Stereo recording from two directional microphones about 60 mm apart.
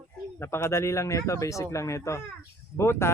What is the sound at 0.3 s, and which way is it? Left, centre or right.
Speech, left.